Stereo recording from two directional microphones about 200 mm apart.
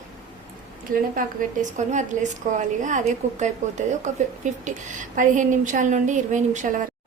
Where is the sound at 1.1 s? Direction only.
40° right (ahead or behind).